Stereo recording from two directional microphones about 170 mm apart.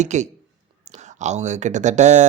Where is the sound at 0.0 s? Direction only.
45° right (ahead or behind).